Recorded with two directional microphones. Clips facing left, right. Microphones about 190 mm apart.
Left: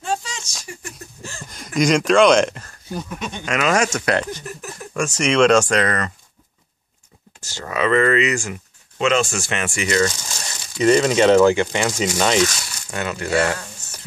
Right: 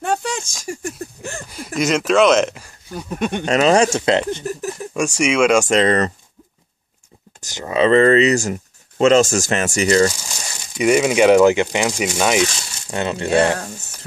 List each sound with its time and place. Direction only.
0.0 s a sound: 60° right (ahead or behind)
1.5 s speech: 5° right (ahead or behind)
3.2 s speech: 60° right (ahead or behind)
3.4 s speech: 30° right (ahead or behind)
4.9 s speech: 10° right (ahead or behind)
5.7 s speech: 25° right (ahead or behind)
7.3 s speech: 15° right (ahead or behind); by 10.1 s 35° right (ahead or behind)
10.8 s speech: 10° right (ahead or behind)
12.9 s speech: 25° right (ahead or behind)